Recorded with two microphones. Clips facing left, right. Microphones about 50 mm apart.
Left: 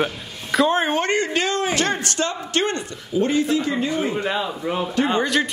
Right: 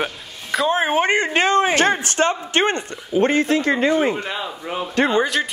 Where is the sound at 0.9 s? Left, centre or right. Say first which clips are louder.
Right 3 dB; centre; by 3.9 s right.